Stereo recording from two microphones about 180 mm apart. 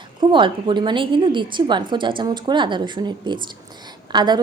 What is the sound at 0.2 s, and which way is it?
A woman's voice, 25° right (ahead or behind).